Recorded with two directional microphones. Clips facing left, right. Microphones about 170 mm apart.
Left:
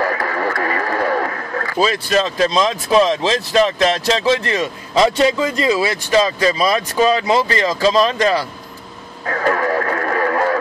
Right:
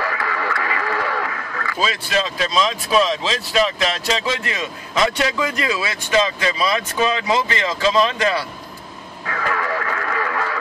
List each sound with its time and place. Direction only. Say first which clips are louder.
0.0 s radio: left 5 dB; 40° left (ahead or behind)
2.5 s speech: left 1 dB; 20° left (ahead or behind)
3.8 s a man's voice: left 6 dB; 40° left (ahead or behind)
9.2 s radio: left 6 dB; 40° left (ahead or behind)